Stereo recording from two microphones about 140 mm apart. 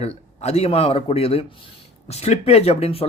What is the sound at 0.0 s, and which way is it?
Speech, 50° left (ahead or behind).